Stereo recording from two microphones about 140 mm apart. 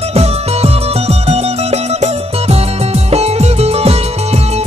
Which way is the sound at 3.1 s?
50° right (ahead or behind).